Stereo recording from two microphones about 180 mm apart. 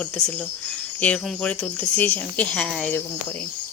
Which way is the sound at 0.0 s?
5° left (ahead or behind).